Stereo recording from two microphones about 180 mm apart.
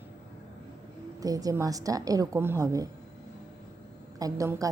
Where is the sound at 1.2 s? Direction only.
20° right (ahead or behind).